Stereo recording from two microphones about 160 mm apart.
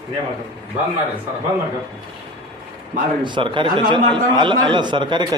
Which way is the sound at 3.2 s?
30° right (ahead or behind).